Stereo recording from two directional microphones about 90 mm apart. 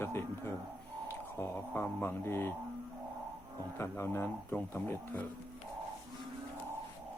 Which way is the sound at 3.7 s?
25° left (ahead or behind).